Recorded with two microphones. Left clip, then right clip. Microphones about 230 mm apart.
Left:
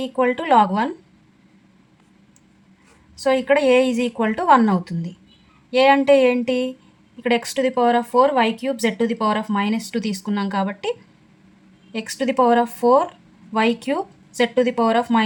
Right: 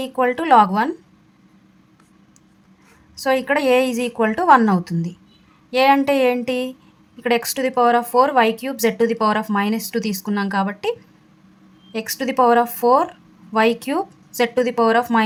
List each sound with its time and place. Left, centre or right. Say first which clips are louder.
0.0 s speech: right 1 dB; right
3.2 s speech: left 1 dB; right